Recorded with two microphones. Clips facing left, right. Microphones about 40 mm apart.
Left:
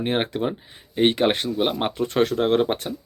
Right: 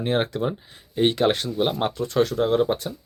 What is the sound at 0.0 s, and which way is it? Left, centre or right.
Speech, left.